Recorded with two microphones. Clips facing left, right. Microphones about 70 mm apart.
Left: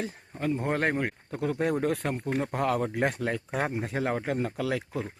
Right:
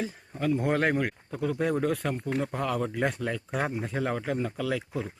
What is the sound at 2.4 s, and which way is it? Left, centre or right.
Speech, left.